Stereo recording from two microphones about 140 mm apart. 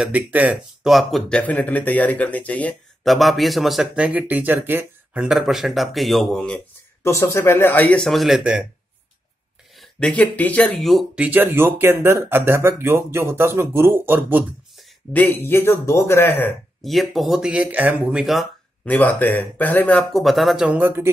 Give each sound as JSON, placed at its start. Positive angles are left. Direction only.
{"t": 0.0, "sound": "speech", "side_deg": -10}
{"t": 1.4, "sound": "speech", "side_deg": 10}
{"t": 7.0, "sound": "speech", "side_deg": 20}
{"t": 9.8, "sound": "speech", "side_deg": 5}
{"t": 11.2, "sound": "speech", "side_deg": -15}
{"t": 15.1, "sound": "speech", "side_deg": 15}
{"t": 16.8, "sound": "speech", "side_deg": 0}
{"t": 18.9, "sound": "speech", "side_deg": 15}